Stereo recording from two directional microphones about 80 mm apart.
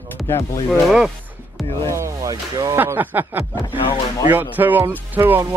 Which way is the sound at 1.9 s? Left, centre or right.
Right.